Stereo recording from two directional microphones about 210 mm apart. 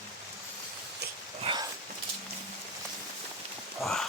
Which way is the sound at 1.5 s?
25° right (ahead or behind).